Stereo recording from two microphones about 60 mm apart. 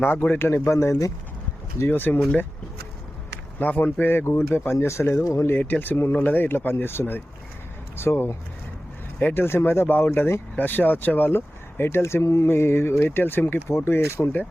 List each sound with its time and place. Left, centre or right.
0.0 s speech: left
1.9 s speech: left
3.6 s speech: left
5.5 s speech: left
9.3 s speech: left